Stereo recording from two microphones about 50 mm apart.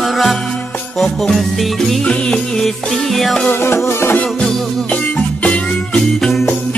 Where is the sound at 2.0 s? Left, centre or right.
Centre.